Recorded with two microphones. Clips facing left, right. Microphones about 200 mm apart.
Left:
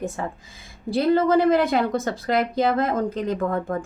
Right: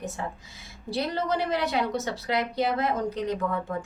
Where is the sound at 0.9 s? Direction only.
55° left (ahead or behind).